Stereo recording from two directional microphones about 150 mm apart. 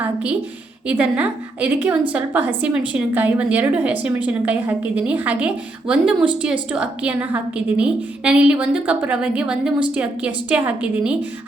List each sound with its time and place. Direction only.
0.0 s a woman's voice: 10° right (ahead or behind)